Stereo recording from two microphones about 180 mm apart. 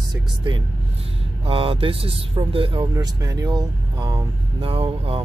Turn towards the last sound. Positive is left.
turn(degrees=-30)  # may be behind; listen again after turning